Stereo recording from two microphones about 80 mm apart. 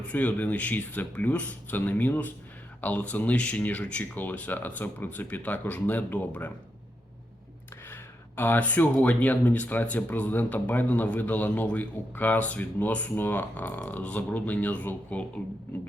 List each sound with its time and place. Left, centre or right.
0.1 s speech: left
8.4 s speech: left